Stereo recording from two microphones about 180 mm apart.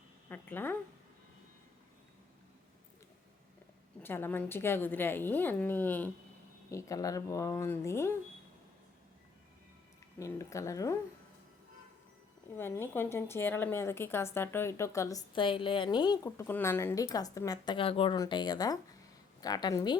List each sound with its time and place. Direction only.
0.3 s speech: 10° left (ahead or behind)
4.0 s a woman's voice: 10° left (ahead or behind)
10.2 s a woman's voice: 15° left (ahead or behind)
12.5 s a woman's voice: 10° left (ahead or behind)